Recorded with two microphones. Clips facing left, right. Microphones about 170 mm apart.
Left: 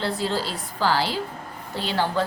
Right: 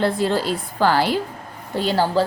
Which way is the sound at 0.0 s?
55° right (ahead or behind).